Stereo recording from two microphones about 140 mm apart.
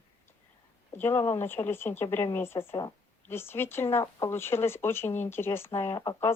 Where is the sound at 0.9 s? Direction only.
15° left (ahead or behind).